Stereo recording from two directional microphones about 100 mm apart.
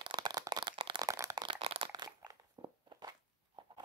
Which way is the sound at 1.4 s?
75° right (ahead or behind).